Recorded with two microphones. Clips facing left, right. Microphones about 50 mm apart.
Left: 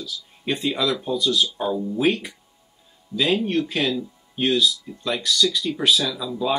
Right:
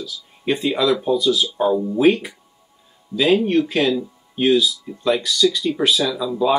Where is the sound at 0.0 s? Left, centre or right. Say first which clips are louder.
Right 4 dB; centre.